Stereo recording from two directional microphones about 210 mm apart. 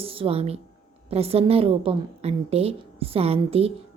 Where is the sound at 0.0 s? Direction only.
25° right (ahead or behind).